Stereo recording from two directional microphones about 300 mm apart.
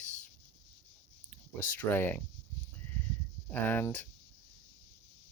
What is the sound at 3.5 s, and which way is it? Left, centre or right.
Speech, centre.